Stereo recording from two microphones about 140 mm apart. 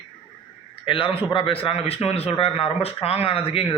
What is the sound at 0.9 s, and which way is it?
A man's voice, 35° left (ahead or behind).